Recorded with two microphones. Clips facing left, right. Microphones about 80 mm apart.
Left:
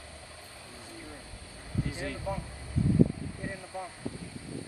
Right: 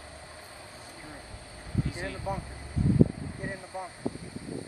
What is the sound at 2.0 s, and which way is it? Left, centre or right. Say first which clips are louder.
Speech: right 1 dB; right.